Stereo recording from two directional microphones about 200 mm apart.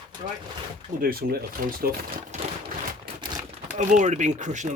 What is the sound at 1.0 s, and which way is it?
Speech, 45° right (ahead or behind).